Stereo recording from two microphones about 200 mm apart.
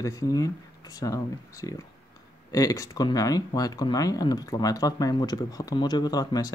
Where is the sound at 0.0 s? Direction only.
15° left (ahead or behind).